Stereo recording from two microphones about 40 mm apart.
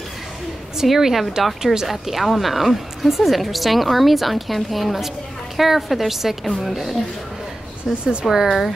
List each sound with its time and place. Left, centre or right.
0.8 s a woman's voice: centre
8.0 s speech: right
8.5 s speech: centre